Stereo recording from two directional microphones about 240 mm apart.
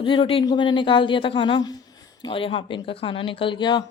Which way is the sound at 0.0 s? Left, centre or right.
Left.